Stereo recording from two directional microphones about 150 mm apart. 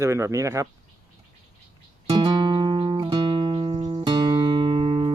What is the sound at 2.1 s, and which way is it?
Music, 30° right (ahead or behind).